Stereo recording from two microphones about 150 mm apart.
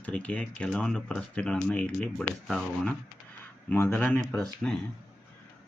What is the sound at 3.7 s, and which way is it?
Speech, 15° left (ahead or behind).